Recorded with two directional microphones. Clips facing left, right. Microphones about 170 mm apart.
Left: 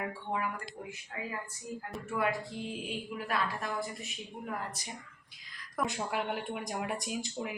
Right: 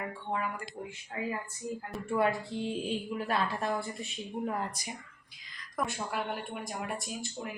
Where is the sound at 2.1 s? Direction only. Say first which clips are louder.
Right 4 dB; 30° right (ahead or behind).